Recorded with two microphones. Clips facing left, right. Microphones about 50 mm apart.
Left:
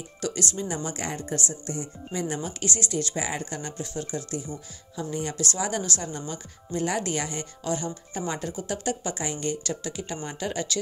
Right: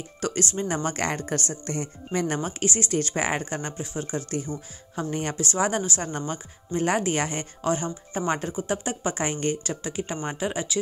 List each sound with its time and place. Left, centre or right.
0.2 s speech: right
2.6 s speech: right
4.3 s speech: right
5.3 s speech: right
5.6 s speech: right
9.6 s speech: right